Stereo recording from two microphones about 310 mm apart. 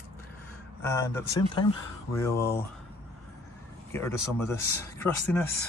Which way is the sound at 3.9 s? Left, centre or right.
Centre.